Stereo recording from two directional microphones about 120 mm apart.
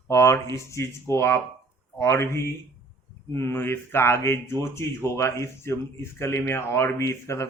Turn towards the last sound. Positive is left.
turn(degrees=25)  # may be behind; listen again after turning